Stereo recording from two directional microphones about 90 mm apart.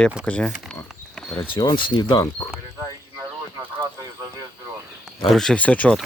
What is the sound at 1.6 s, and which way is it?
Speech, 60° left (ahead or behind).